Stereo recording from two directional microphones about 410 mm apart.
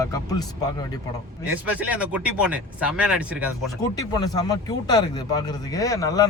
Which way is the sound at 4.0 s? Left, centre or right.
Centre.